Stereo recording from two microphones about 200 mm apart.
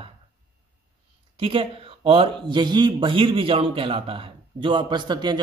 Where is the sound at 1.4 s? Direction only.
25° right (ahead or behind).